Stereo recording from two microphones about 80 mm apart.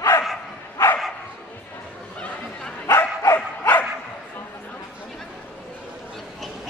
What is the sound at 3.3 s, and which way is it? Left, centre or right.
Dog, left.